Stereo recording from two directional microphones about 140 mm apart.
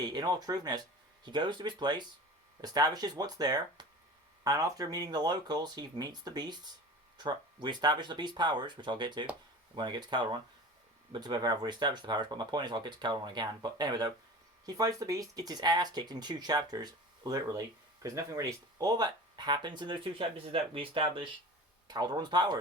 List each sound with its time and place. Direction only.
0.0 s speech: 30° right (ahead or behind)